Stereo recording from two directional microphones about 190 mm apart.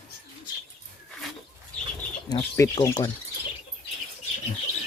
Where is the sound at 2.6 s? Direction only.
20° left (ahead or behind).